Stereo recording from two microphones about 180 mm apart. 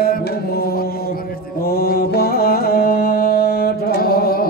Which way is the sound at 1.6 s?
60° left (ahead or behind).